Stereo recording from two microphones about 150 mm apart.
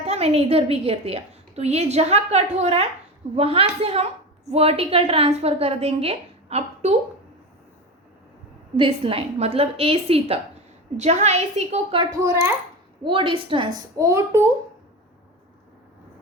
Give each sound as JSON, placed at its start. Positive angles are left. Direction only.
{"t": 0.0, "sound": "a woman's voice", "side_deg": -45}
{"t": 8.7, "sound": "a woman's voice", "side_deg": -40}
{"t": 12.1, "sound": "a child's voice", "side_deg": -20}
{"t": 13.1, "sound": "a woman's voice", "side_deg": -35}
{"t": 13.9, "sound": "a child's voice", "side_deg": -20}